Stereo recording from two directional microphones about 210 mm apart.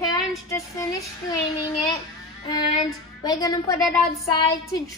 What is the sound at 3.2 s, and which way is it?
Child singing, 20° left (ahead or behind).